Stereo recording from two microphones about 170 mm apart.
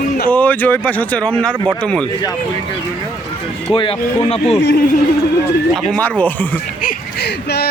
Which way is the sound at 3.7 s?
30° left (ahead or behind).